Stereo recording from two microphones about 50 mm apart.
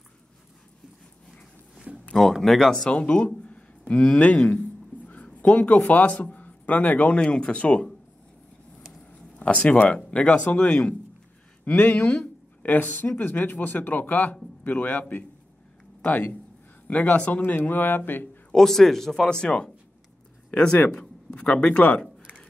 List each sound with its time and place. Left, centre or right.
1.9 s a sound: centre
2.3 s speech: centre
2.9 s speech: left
9.4 s speech: left
18.5 s speech: centre